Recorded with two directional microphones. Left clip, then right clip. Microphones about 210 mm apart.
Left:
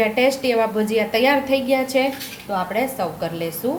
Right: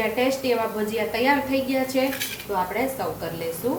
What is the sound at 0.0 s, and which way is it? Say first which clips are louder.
A woman's voice: left 5 dB; 40° left (ahead or behind).